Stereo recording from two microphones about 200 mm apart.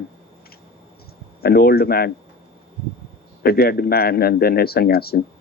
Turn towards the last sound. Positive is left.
turn(degrees=50)  # may be behind; listen again after turning